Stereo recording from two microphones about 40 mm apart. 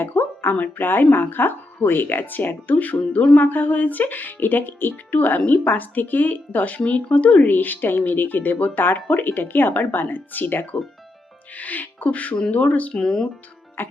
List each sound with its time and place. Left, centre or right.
0.0 s a sound: left
0.8 s speech: left
7.5 s speech: left
11.5 s speech: left
12.9 s speech: centre
13.8 s music: left